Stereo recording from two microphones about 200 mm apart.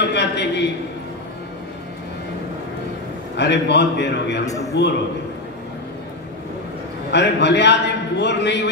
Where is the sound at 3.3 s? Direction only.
60° left (ahead or behind).